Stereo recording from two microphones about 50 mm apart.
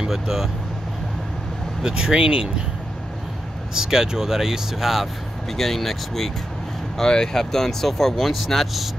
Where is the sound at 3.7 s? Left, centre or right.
Centre.